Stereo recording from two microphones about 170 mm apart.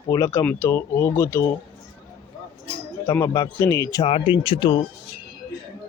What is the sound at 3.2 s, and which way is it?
Speech, 20° left (ahead or behind).